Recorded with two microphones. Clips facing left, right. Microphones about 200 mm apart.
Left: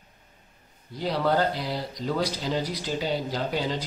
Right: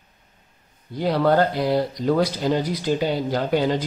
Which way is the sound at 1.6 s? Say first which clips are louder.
Right 10 dB; 55° right (ahead or behind).